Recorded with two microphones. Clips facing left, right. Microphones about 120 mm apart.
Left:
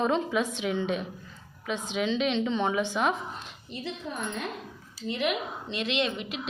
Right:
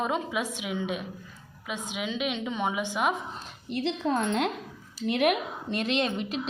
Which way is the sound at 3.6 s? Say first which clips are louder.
Right 9 dB; 70° right (ahead or behind).